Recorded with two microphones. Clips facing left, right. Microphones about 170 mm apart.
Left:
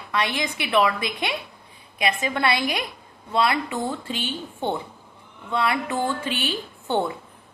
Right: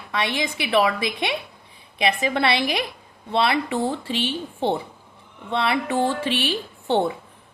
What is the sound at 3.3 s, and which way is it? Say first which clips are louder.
Speech: right 1 dB; 30° right (ahead or behind).